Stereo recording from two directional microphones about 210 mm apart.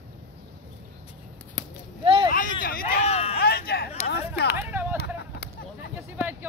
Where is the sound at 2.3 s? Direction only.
40° left (ahead or behind).